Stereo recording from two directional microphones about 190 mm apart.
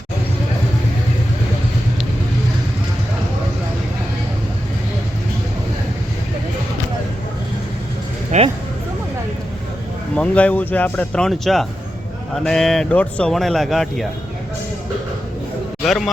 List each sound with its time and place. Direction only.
8.3 s speech: 40° right (ahead or behind)
10.2 s speech: 5° left (ahead or behind)
15.8 s speech: centre (ahead or behind)